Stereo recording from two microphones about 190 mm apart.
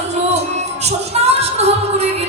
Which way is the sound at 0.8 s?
35° right (ahead or behind).